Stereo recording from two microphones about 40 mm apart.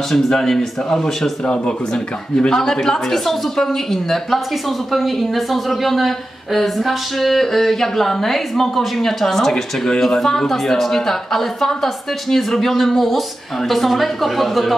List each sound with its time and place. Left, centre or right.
0.1 s speech: centre
1.4 s speech: left; by 14.7 s centre